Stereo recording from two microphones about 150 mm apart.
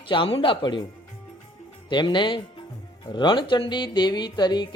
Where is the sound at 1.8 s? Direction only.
30° left (ahead or behind).